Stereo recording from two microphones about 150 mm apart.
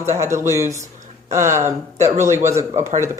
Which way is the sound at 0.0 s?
20° right (ahead or behind).